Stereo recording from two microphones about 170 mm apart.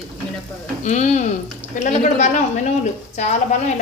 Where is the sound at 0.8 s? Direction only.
45° left (ahead or behind).